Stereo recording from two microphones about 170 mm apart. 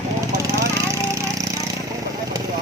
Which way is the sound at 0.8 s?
20° right (ahead or behind).